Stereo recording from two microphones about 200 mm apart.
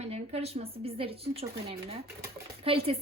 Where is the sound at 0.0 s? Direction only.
30° right (ahead or behind).